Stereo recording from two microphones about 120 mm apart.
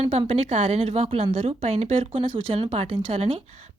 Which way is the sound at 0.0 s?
55° right (ahead or behind).